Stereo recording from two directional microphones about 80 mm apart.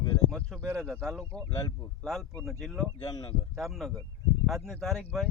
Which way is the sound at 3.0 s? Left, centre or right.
Left.